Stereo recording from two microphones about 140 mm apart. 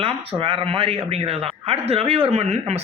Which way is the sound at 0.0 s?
40° right (ahead or behind).